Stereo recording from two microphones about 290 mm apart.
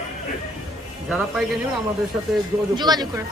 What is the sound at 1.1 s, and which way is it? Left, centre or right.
Speech, centre.